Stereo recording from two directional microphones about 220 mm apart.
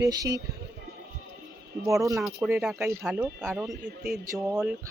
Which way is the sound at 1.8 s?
15° right (ahead or behind).